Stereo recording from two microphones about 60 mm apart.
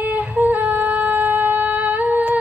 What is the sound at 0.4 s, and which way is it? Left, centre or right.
Humming, right.